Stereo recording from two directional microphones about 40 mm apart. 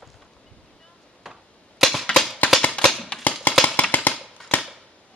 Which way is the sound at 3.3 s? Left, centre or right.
Left.